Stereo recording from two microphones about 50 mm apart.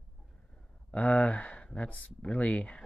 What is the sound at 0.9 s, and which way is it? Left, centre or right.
Speech, left.